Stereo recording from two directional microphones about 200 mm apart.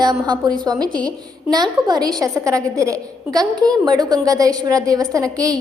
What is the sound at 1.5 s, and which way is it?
A woman's voice, 20° right (ahead or behind).